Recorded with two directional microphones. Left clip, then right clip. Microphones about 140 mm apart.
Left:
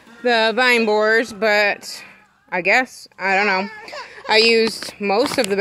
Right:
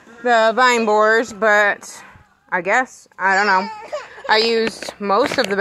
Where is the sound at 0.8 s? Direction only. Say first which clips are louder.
Right 2 dB; 10° left (ahead or behind).